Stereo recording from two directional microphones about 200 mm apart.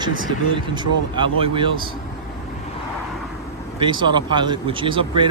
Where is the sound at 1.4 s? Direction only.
25° right (ahead or behind).